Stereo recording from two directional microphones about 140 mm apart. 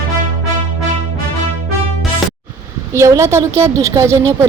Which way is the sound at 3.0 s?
20° right (ahead or behind).